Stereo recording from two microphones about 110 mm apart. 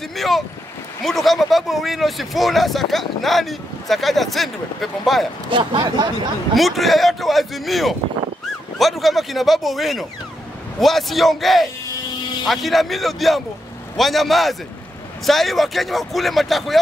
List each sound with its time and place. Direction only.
0.1 s boat: centre (ahead or behind)
1.0 s speech: centre (ahead or behind)
5.5 s speech: 50° right (ahead or behind)
6.5 s speech: centre (ahead or behind)